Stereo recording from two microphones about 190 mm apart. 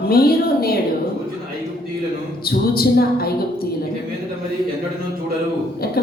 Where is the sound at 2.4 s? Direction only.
50° left (ahead or behind).